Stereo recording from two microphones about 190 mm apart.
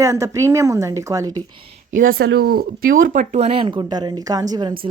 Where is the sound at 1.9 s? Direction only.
90° right.